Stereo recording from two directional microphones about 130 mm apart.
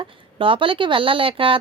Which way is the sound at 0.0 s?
40° right (ahead or behind).